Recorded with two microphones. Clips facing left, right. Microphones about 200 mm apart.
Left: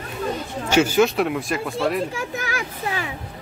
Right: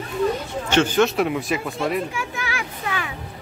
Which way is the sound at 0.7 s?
10° left (ahead or behind).